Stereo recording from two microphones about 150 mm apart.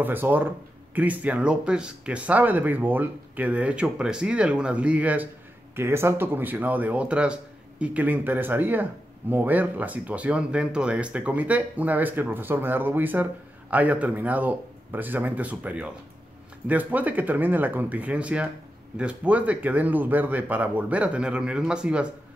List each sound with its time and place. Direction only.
0.0 s speech: 15° right (ahead or behind)